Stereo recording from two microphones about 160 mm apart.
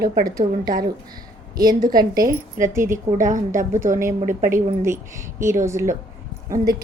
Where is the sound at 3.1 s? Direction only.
50° right (ahead or behind).